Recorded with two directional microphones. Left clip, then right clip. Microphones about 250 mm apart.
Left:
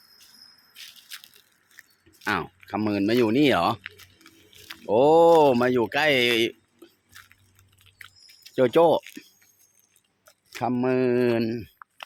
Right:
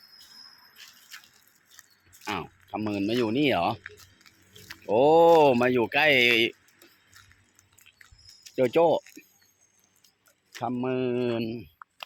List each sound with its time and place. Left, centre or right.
1.1 s crushing: centre
2.2 s speech: left
3.8 s music: centre
4.9 s speech: centre
7.9 s a sound: centre
8.5 s speech: centre
10.6 s speech: left